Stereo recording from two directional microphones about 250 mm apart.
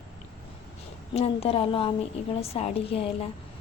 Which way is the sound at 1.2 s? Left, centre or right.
Left.